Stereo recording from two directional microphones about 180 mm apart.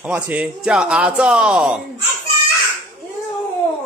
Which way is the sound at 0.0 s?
5° right (ahead or behind).